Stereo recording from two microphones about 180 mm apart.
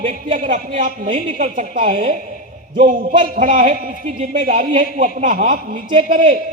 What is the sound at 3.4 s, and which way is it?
A man's voice, 45° right (ahead or behind).